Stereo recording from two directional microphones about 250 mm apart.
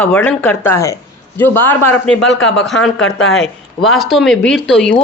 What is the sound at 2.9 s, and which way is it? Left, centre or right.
Speech, left.